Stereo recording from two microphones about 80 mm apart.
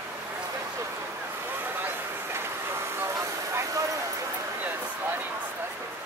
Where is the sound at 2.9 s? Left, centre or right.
Right.